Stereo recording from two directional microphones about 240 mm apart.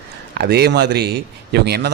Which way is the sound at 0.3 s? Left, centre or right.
Right.